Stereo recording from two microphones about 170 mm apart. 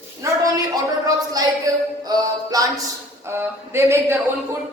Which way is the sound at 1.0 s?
20° right (ahead or behind).